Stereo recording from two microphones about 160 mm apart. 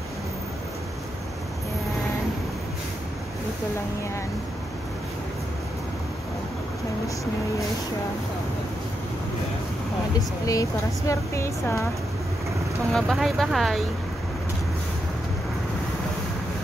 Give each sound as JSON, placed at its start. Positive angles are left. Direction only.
{"t": 10.4, "sound": "speech", "side_deg": 20}
{"t": 12.9, "sound": "speech", "side_deg": 0}